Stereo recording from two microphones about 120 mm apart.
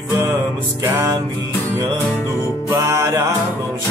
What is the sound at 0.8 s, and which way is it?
Music, 20° right (ahead or behind).